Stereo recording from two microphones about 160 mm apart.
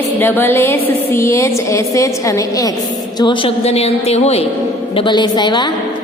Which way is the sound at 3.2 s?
30° left (ahead or behind).